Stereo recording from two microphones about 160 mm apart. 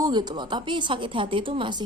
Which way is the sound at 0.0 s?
25° right (ahead or behind).